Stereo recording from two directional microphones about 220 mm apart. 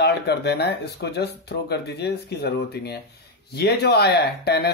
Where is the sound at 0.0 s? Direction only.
50° left (ahead or behind).